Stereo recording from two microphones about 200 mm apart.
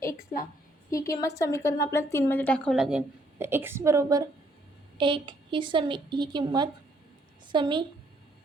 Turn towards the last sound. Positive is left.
turn(degrees=-25)  # may be behind; listen again after turning